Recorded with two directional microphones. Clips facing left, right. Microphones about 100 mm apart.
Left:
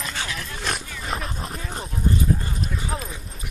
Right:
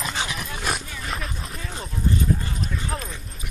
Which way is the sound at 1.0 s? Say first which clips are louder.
Left 2 dB; centre (ahead or behind).